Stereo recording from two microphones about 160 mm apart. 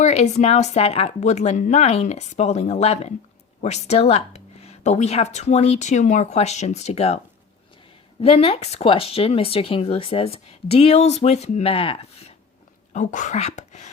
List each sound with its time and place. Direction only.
0.0 s speech: 45° left (ahead or behind)
8.2 s speech: 35° left (ahead or behind)
12.9 s speech: 50° left (ahead or behind)